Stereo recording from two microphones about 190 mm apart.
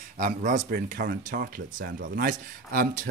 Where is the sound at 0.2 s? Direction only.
45° right (ahead or behind).